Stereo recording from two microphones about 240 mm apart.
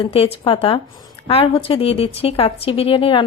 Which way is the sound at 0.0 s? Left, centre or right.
Left.